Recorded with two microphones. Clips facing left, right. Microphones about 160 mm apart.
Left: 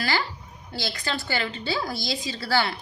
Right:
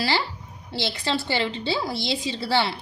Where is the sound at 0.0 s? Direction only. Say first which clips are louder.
Right 2 dB; 30° right (ahead or behind).